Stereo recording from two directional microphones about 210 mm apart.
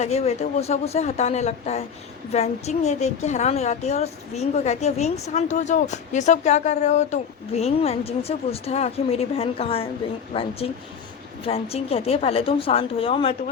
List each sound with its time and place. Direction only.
0.0 s a woman's voice: 30° left (ahead or behind)